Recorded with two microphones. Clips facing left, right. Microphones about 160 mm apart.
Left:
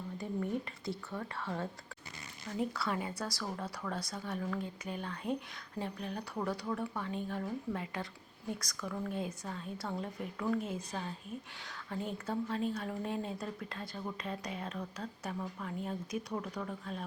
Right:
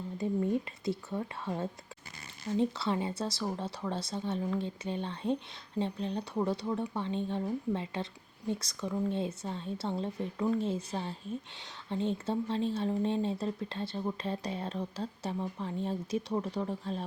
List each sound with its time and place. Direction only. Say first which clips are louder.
0.2 s speech: right 6 dB; 25° right (ahead or behind)